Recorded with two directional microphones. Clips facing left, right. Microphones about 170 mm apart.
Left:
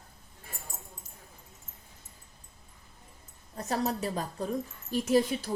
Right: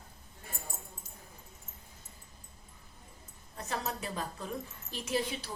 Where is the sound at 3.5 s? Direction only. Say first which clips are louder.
Left 7 dB; 40° left (ahead or behind).